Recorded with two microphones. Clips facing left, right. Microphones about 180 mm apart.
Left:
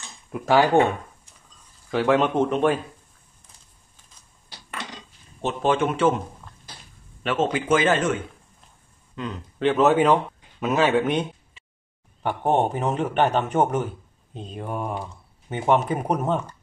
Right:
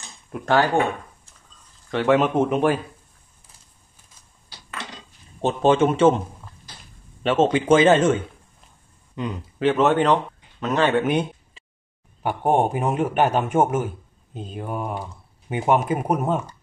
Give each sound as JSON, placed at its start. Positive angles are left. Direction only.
{"t": 0.3, "sound": "speech", "side_deg": 10}
{"t": 1.9, "sound": "speech", "side_deg": 0}
{"t": 5.4, "sound": "speech", "side_deg": -30}
{"t": 7.2, "sound": "speech", "side_deg": -25}
{"t": 9.6, "sound": "a man's voice", "side_deg": 0}